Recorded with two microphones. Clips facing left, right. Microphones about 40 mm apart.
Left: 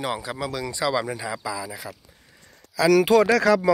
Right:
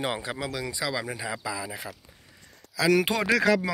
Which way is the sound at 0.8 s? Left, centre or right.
Centre.